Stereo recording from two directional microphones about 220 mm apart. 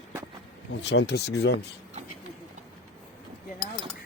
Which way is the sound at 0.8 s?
50° left (ahead or behind).